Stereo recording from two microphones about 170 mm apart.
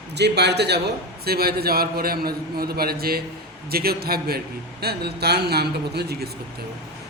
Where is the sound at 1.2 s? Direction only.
65° right (ahead or behind).